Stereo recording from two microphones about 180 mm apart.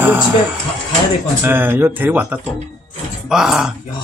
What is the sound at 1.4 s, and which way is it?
A man's voice, 10° right (ahead or behind).